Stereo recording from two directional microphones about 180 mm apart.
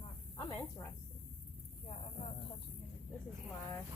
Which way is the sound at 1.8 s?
35° left (ahead or behind).